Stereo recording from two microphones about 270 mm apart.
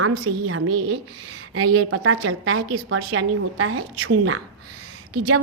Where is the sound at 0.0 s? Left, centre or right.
Right.